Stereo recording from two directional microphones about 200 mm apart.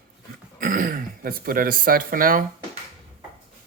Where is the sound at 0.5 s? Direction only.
45° right (ahead or behind).